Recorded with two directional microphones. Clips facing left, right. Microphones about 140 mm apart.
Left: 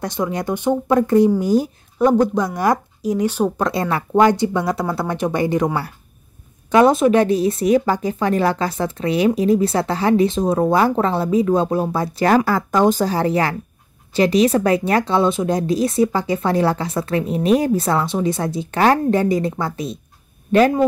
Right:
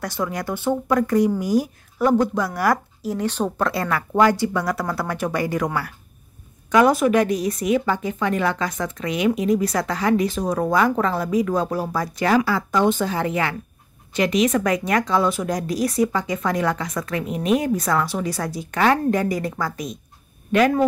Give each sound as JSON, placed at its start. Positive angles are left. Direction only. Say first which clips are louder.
{"t": 0.0, "sound": "speech", "louder": "left 4 dB", "side_deg": 20}
{"t": 12.4, "sound": "a woman's voice", "louder": "left 3 dB", "side_deg": 45}